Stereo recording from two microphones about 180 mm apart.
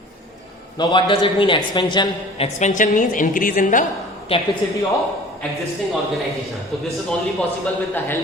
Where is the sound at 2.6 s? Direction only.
45° left (ahead or behind).